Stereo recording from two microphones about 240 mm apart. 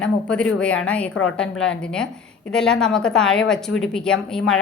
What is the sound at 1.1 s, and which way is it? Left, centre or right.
Speech, left.